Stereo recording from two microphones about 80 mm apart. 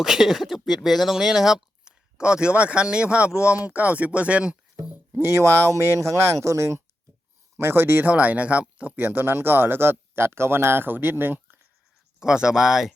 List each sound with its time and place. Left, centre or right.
0.0 s speech: centre
5.2 s speech: right
8.1 s speech: centre
12.2 s speech: centre